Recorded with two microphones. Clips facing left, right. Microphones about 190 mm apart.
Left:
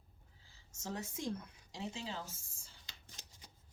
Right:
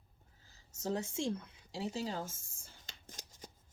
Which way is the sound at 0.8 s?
30° right (ahead or behind).